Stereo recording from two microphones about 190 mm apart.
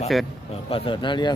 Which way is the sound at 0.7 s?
25° left (ahead or behind).